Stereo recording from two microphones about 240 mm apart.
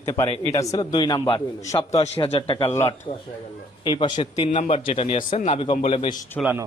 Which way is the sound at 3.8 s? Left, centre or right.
Left.